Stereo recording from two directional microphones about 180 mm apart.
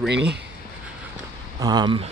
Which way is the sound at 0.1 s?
70° right (ahead or behind).